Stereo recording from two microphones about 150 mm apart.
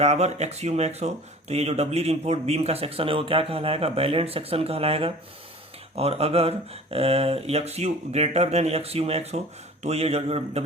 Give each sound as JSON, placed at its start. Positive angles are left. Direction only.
{"t": 0.0, "sound": "speech", "side_deg": -45}